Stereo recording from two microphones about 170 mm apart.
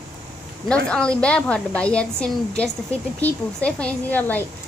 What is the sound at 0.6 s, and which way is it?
A woman's voice, 5° left (ahead or behind).